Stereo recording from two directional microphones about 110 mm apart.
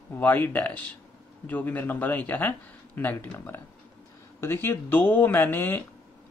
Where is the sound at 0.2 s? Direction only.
15° left (ahead or behind).